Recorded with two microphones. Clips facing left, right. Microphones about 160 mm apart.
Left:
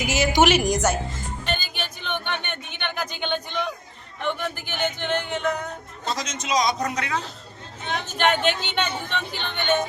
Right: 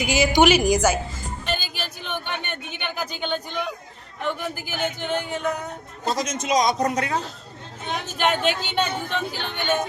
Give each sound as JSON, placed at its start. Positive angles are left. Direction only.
{"t": 0.1, "sound": "speech", "side_deg": 0}
{"t": 1.5, "sound": "a sound", "side_deg": -5}
{"t": 4.2, "sound": "speech", "side_deg": -5}
{"t": 6.1, "sound": "a man's voice", "side_deg": -50}
{"t": 7.9, "sound": "speech", "side_deg": -5}